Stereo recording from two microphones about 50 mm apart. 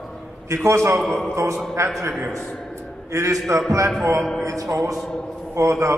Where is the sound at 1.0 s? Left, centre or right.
Centre.